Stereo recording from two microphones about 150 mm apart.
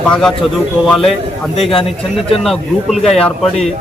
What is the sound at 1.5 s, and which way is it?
Speech, 40° left (ahead or behind).